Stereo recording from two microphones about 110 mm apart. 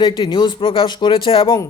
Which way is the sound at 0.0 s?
45° left (ahead or behind).